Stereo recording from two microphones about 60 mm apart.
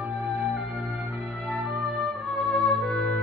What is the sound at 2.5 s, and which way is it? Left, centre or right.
Music, centre.